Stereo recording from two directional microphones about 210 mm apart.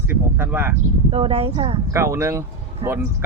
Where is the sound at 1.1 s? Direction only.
30° right (ahead or behind).